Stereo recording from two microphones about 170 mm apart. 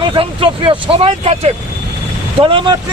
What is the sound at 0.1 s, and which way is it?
Speech, 30° right (ahead or behind).